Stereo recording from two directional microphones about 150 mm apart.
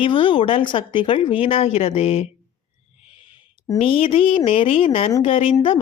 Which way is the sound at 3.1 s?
35° left (ahead or behind).